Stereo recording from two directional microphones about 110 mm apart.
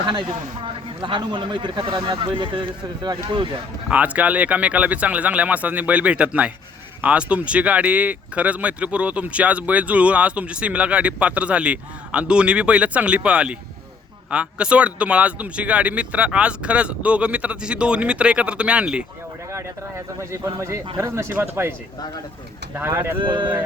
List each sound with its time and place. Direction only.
0.0 s a man's voice: 45° right (ahead or behind)
3.8 s speech: 15° right (ahead or behind)
19.5 s a sound: 25° right (ahead or behind)
20.3 s speech: 25° right (ahead or behind)
23.1 s a man's voice: 45° right (ahead or behind)